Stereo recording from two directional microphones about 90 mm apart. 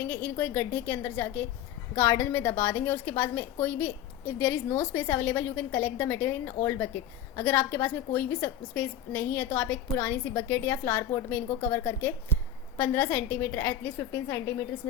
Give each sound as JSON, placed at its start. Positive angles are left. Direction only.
{"t": 0.1, "sound": "a woman's voice", "side_deg": 25}